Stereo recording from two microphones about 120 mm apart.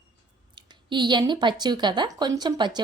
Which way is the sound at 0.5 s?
40° right (ahead or behind).